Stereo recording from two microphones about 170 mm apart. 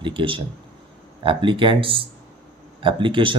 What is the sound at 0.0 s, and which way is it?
Speech, 30° right (ahead or behind).